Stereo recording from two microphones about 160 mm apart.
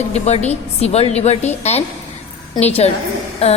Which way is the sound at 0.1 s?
40° left (ahead or behind).